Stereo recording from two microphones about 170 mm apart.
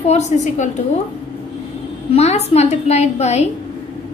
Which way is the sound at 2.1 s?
40° left (ahead or behind).